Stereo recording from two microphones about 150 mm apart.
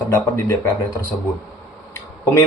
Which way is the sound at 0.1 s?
15° left (ahead or behind).